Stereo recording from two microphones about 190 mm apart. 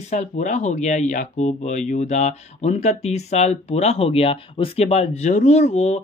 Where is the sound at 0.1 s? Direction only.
40° left (ahead or behind).